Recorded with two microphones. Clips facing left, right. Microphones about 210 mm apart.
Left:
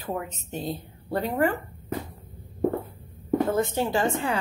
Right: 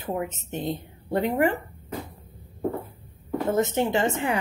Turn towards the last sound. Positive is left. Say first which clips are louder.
# right 1 dB
turn(degrees=-20)  # may be behind; listen again after turning